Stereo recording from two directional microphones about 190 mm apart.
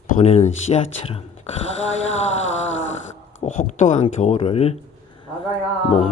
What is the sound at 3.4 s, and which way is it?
Speech, 40° left (ahead or behind).